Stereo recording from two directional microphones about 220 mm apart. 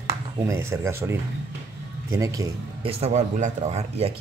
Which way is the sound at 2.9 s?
30° right (ahead or behind).